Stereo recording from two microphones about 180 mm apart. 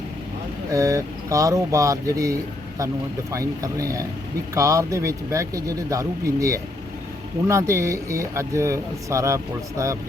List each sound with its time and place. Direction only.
0.7 s speech: 20° right (ahead or behind)
3.3 s speech: 20° right (ahead or behind)